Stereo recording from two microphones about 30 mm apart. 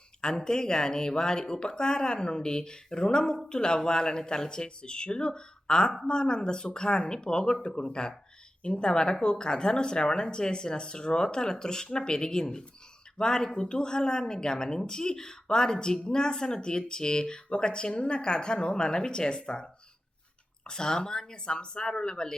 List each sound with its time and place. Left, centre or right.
0.2 s a woman's voice: left
20.7 s a woman's voice: left